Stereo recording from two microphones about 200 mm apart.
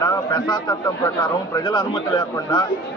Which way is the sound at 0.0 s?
20° left (ahead or behind).